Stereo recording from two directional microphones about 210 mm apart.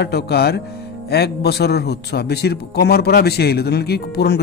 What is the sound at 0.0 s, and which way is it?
Speech, 50° left (ahead or behind).